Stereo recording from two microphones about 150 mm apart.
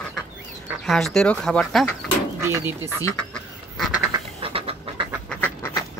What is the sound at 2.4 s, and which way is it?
Speech, 20° right (ahead or behind).